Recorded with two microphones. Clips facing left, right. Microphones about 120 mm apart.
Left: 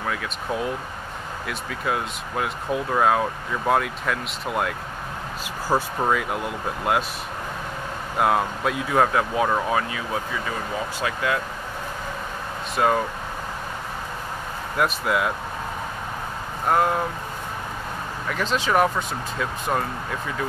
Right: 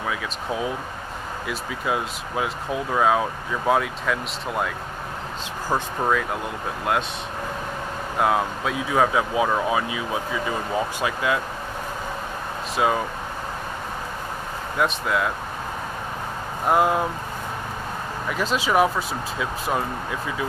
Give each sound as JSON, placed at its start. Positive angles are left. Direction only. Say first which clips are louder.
{"t": 1.5, "sound": "speech", "louder": "right 1 dB", "side_deg": -5}
{"t": 5.7, "sound": "speech", "louder": "left 1 dB", "side_deg": 5}
{"t": 8.2, "sound": "speech", "louder": "left 1 dB", "side_deg": 0}
{"t": 12.7, "sound": "speech", "louder": "left 1 dB", "side_deg": -5}
{"t": 14.8, "sound": "speech", "louder": "even", "side_deg": 5}
{"t": 16.6, "sound": "speech", "louder": "right 1 dB", "side_deg": -10}
{"t": 18.4, "sound": "speech", "louder": "right 1 dB", "side_deg": -5}